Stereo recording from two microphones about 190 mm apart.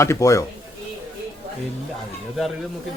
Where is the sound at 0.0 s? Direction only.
15° left (ahead or behind).